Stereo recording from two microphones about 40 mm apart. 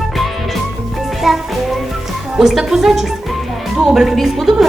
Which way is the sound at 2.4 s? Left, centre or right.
Centre.